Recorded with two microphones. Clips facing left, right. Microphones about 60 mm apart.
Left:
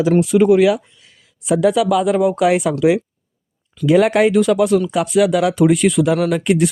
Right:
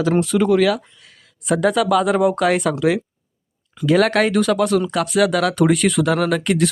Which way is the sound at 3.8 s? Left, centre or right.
Centre.